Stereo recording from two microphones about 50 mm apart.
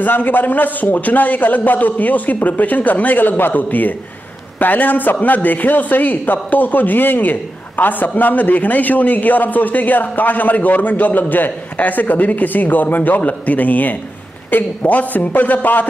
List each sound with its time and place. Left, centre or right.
0.0 s a man's voice: left